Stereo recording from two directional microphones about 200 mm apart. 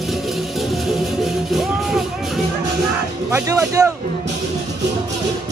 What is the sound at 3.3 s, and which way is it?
Speech, 15° right (ahead or behind).